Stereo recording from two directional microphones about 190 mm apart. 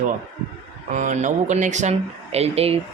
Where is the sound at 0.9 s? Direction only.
40° right (ahead or behind).